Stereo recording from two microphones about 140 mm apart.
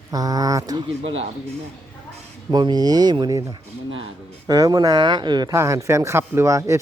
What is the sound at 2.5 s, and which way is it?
Speech, 30° right (ahead or behind).